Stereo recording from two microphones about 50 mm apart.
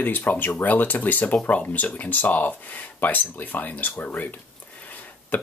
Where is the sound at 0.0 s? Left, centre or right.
Left.